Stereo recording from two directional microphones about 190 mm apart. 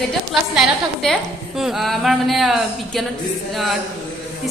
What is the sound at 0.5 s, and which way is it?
A woman's voice, centre (ahead or behind).